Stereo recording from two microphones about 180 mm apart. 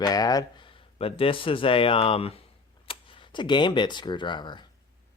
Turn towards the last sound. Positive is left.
turn(degrees=25)  # may be behind; listen again after turning